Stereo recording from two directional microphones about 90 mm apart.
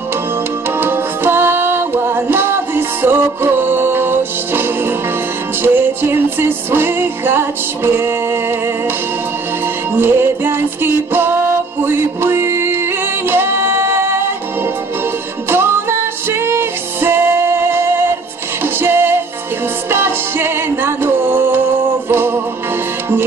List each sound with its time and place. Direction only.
0.7 s music: 25° right (ahead or behind)
9.9 s music: 25° right (ahead or behind)
15.5 s music: 25° right (ahead or behind)
18.6 s music: 25° right (ahead or behind)